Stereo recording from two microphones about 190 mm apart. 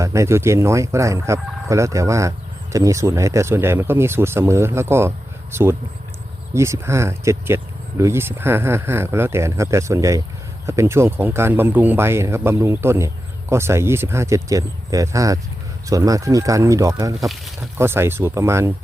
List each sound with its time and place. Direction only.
0.0 s speech: 15° right (ahead or behind)
17.2 s speech: centre (ahead or behind)
17.7 s speech: 10° right (ahead or behind)